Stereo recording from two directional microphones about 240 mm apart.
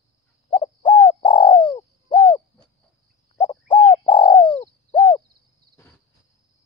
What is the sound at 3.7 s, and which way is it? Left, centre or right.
Bird, left.